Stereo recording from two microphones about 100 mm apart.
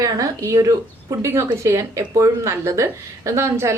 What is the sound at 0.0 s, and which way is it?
A woman's voice, 35° right (ahead or behind).